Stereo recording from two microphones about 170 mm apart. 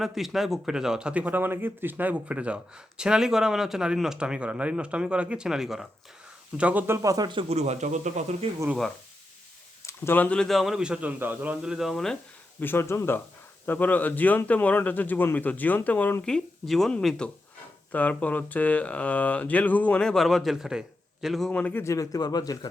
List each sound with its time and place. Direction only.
0.0 s a man's voice: centre (ahead or behind); by 8.4 s 40° right (ahead or behind)
9.8 s speech: 15° left (ahead or behind)
12.5 s speech: 15° left (ahead or behind)